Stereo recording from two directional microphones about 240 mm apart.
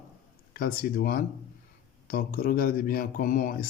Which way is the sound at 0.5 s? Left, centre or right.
Left.